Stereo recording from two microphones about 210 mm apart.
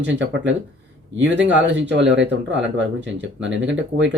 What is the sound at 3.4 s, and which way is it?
Speech, 60° right (ahead or behind).